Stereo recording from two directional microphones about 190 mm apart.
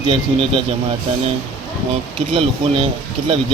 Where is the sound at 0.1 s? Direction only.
30° right (ahead or behind).